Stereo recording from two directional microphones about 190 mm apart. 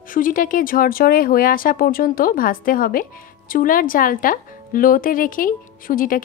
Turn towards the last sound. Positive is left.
turn(degrees=45)  # may be behind; listen again after turning